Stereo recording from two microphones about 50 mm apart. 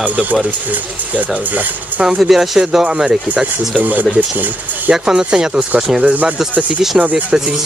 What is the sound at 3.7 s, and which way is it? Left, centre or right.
Speech, right.